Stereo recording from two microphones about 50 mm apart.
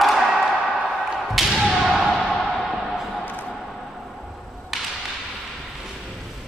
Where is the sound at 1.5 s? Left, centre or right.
Centre.